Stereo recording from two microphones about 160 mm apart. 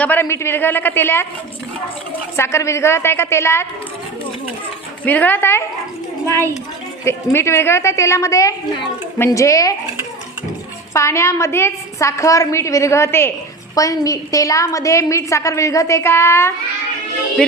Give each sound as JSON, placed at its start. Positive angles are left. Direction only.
{"t": 0.0, "sound": "a woman's voice", "side_deg": 10}
{"t": 2.3, "sound": "a woman's voice", "side_deg": 15}
{"t": 5.0, "sound": "a woman's voice", "side_deg": 10}
{"t": 7.0, "sound": "a woman's voice", "side_deg": 15}
{"t": 10.9, "sound": "a woman's voice", "side_deg": 15}